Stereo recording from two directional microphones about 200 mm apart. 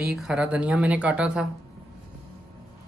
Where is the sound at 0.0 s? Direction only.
5° right (ahead or behind).